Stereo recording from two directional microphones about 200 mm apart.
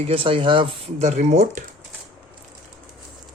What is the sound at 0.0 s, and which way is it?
Speech, 25° right (ahead or behind).